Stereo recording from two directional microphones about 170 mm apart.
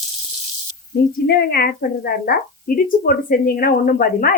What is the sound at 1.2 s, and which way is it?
A woman's voice, 60° left (ahead or behind).